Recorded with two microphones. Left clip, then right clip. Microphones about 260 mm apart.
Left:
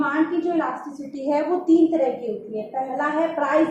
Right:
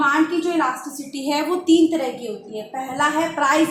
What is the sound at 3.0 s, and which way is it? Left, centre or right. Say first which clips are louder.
Speech: right 4 dB; right.